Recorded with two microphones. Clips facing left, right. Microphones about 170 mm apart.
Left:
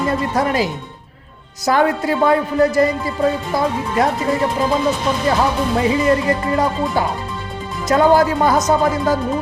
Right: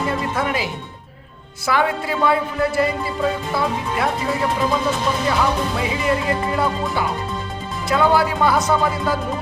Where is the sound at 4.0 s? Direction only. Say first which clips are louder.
Left 6 dB; 40° left (ahead or behind).